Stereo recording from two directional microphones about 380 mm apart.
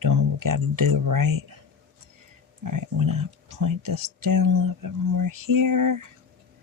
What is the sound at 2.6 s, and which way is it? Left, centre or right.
Speech, right.